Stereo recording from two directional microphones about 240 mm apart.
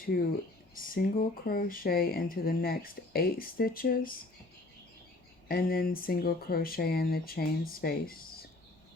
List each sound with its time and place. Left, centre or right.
0.1 s speech: left
5.5 s speech: left